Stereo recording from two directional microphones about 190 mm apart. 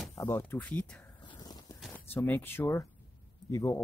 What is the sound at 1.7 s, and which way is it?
Speech, 5° left (ahead or behind).